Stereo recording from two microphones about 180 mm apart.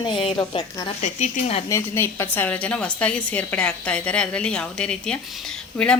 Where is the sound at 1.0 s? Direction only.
40° left (ahead or behind).